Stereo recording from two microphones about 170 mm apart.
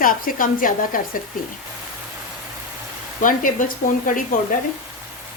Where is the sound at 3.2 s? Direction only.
50° left (ahead or behind).